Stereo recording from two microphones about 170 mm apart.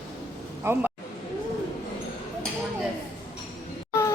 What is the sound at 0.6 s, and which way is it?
Speech, 10° right (ahead or behind).